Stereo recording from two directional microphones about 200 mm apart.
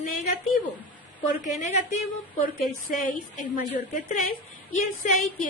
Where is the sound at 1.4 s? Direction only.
40° left (ahead or behind).